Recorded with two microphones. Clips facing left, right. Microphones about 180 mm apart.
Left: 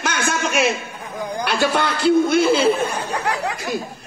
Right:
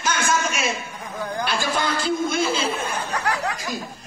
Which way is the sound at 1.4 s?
65° left (ahead or behind).